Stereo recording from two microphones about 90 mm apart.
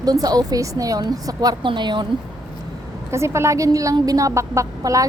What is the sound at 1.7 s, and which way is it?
Speech, 60° right (ahead or behind).